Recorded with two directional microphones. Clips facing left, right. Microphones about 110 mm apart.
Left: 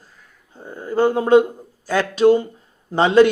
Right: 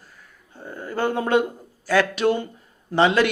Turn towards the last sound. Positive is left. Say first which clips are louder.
# left 5 dB
turn(degrees=30)  # may be behind; listen again after turning